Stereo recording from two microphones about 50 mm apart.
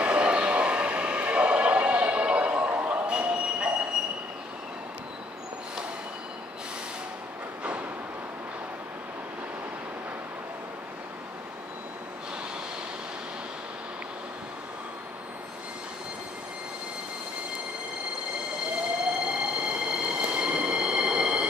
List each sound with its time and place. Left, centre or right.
0.0 s vehicle: right
19.2 s train: centre